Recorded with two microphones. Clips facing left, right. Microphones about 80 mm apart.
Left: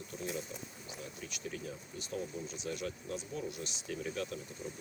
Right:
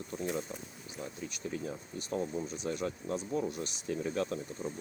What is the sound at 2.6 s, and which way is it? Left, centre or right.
Speech, right.